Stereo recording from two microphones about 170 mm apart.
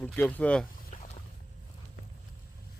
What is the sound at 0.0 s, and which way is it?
Speech, 10° left (ahead or behind).